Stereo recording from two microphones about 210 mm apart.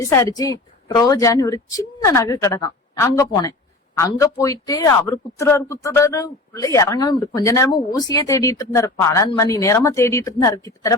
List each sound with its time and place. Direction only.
0.0 s a man's voice: 15° left (ahead or behind)